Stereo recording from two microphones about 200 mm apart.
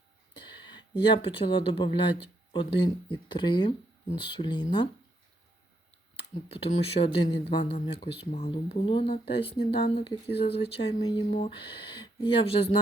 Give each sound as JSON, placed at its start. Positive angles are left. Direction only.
{"t": 0.3, "sound": "speech", "side_deg": 20}
{"t": 6.1, "sound": "speech", "side_deg": 30}